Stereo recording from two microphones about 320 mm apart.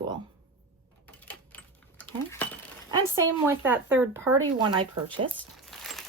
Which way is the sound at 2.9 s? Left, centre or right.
Centre.